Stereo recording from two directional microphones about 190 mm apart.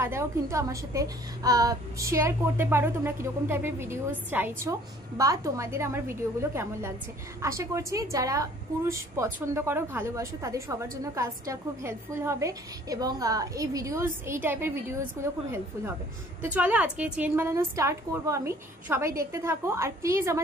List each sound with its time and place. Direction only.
0.0 s a woman's voice: 15° right (ahead or behind)
16.5 s a woman's voice: 5° right (ahead or behind)